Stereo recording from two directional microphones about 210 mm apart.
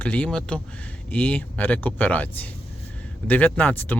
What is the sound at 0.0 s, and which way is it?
Speech, 5° left (ahead or behind).